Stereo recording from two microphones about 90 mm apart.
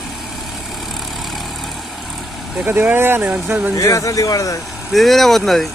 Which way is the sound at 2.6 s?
25° right (ahead or behind).